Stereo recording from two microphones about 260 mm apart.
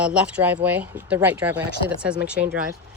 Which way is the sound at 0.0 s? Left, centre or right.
Centre.